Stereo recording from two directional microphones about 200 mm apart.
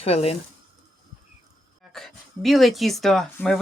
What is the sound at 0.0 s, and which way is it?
Speech, 30° left (ahead or behind).